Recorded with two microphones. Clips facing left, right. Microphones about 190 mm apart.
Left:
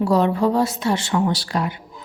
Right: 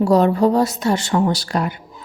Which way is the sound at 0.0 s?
45° right (ahead or behind).